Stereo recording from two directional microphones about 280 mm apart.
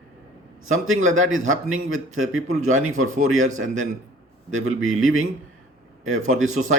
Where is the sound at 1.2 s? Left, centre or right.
Right.